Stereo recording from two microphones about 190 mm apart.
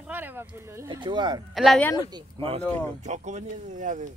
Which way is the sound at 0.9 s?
25° right (ahead or behind).